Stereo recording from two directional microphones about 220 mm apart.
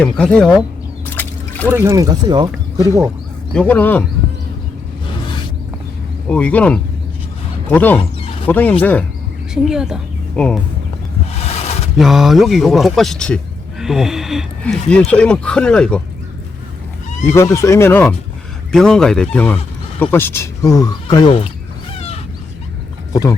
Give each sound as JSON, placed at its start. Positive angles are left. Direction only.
{"t": 0.0, "sound": "speech", "side_deg": 5}
{"t": 1.0, "sound": "a sound", "side_deg": 10}
{"t": 1.7, "sound": "speech", "side_deg": -15}
{"t": 3.5, "sound": "speech", "side_deg": 5}
{"t": 6.2, "sound": "speech", "side_deg": 5}
{"t": 9.6, "sound": "speech", "side_deg": -5}
{"t": 11.4, "sound": "a sound", "side_deg": 30}
{"t": 11.9, "sound": "speech", "side_deg": 0}
{"t": 17.2, "sound": "speech", "side_deg": 10}